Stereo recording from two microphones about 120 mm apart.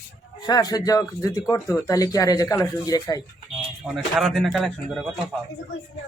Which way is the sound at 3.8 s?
Centre (ahead or behind).